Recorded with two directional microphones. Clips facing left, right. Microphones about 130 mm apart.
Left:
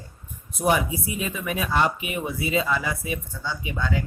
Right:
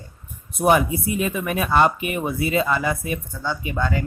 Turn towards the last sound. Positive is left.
turn(degrees=-50)  # may be behind; listen again after turning